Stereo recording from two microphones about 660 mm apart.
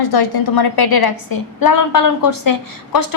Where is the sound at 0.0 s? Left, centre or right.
Left.